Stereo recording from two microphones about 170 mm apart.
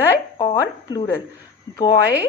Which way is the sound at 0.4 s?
25° left (ahead or behind).